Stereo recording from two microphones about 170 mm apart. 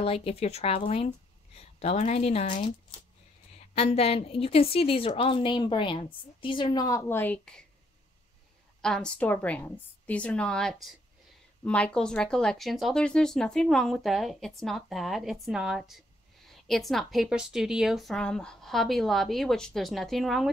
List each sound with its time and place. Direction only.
0.0 s a woman's voice: 35° left (ahead or behind)
3.7 s a woman's voice: 35° left (ahead or behind)
7.1 s a woman's voice: 10° left (ahead or behind)
8.8 s a woman's voice: 5° left (ahead or behind)